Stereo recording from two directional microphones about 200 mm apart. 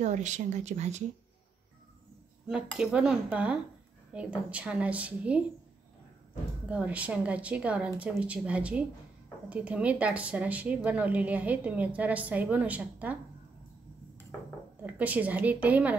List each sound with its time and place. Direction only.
0.0 s speech: 35° right (ahead or behind)
2.4 s cutlery: 5° right (ahead or behind)
4.1 s speech: 5° right (ahead or behind)
6.7 s speech: 5° right (ahead or behind)
14.8 s speech: 10° right (ahead or behind)